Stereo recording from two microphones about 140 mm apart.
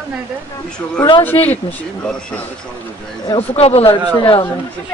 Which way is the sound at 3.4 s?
45° left (ahead or behind).